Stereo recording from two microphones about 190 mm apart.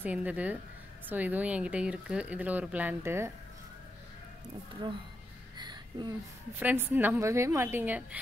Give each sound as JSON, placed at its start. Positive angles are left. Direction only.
{"t": 0.0, "sound": "speech", "side_deg": -10}
{"t": 5.6, "sound": "a sound", "side_deg": -25}
{"t": 6.6, "sound": "speech", "side_deg": -10}